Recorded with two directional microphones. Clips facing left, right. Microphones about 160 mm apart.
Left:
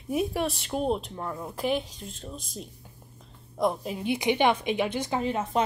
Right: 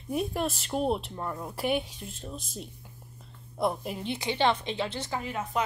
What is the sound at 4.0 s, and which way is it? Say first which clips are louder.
A woman's voice: left 5 dB; 15° left (ahead or behind).